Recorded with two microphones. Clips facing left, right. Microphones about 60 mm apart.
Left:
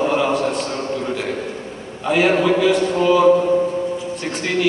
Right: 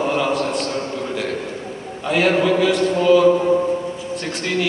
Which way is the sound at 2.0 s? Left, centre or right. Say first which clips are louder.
Left 1 dB; centre.